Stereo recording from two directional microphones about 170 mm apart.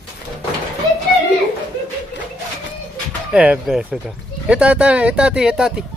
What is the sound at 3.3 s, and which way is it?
Speech, 5° right (ahead or behind).